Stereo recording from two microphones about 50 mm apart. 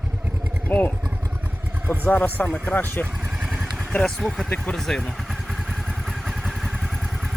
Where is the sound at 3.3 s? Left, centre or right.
Centre.